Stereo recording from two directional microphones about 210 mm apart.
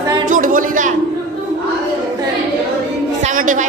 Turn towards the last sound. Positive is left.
turn(degrees=-40)  # may be behind; listen again after turning